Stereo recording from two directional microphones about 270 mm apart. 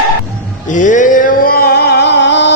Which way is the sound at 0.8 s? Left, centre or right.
Left.